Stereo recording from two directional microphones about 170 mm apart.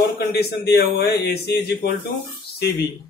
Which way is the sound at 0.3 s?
70° left (ahead or behind).